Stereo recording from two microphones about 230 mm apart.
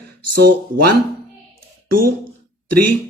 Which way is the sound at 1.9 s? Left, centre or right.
Right.